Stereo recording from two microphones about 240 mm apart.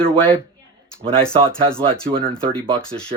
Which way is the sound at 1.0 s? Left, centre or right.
Right.